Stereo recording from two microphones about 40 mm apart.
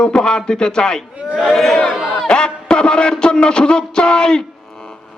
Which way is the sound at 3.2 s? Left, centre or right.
Left.